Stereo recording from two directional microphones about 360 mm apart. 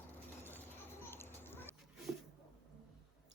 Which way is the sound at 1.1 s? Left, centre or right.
Centre.